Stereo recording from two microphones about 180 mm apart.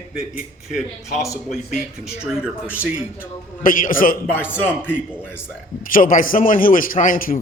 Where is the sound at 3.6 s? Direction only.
50° left (ahead or behind).